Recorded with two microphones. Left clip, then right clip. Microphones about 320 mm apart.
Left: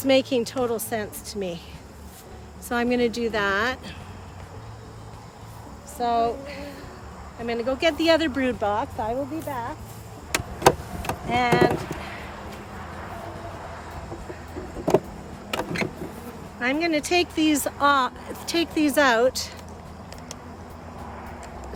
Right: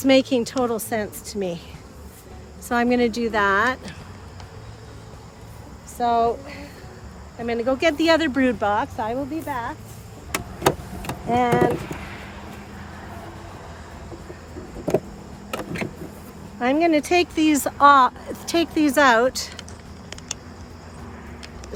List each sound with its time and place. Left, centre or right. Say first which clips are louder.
0.0 s speech: right 3 dB; right
2.6 s speech: right 3 dB; centre
6.0 s speech: right 3 dB; centre
11.3 s speech: right 1 dB; centre
15.4 s vehicle: left 2 dB; centre
16.6 s speech: right 5 dB; centre